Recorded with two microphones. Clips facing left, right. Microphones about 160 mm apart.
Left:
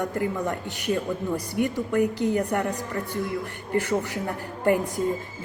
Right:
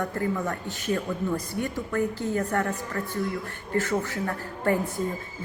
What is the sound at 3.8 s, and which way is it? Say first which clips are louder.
A woman's voice: even; 15° left (ahead or behind).